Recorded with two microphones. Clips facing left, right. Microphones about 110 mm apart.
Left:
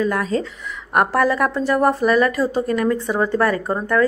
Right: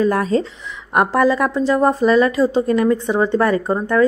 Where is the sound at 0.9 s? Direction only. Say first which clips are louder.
Right 2 dB; 15° right (ahead or behind).